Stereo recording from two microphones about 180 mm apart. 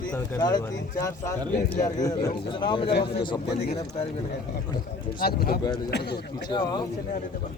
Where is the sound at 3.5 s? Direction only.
65° left (ahead or behind).